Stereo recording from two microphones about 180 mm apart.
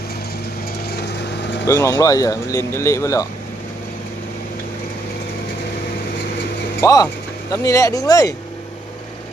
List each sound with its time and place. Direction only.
0.9 s vehicle: 65° left (ahead or behind)
1.6 s speech: 15° left (ahead or behind)
6.8 s speech: 20° left (ahead or behind)